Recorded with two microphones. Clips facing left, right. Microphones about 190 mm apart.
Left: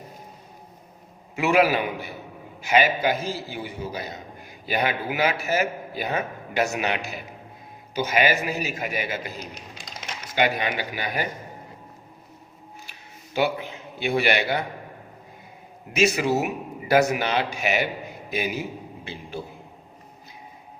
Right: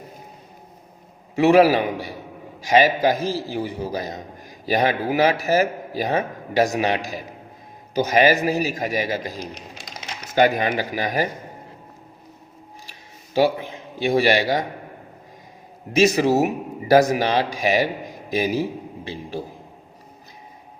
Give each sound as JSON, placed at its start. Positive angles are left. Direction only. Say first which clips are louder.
{"t": 1.4, "sound": "a man's voice", "louder": "right 6 dB", "side_deg": -35}
{"t": 12.9, "sound": "speech", "louder": "right 6 dB", "side_deg": -35}
{"t": 16.0, "sound": "a man's voice", "louder": "right 5 dB", "side_deg": -35}